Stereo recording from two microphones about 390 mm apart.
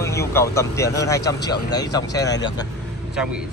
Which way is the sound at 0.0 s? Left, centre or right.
Centre.